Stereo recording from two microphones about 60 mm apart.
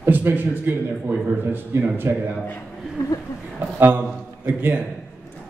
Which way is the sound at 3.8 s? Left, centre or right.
Right.